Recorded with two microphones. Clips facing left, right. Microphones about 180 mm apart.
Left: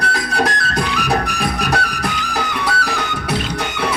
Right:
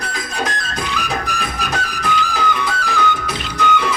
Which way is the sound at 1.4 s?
65° left (ahead or behind).